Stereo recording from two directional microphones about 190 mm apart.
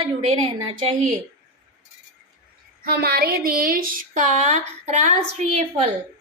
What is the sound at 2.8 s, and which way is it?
Speech, 55° right (ahead or behind).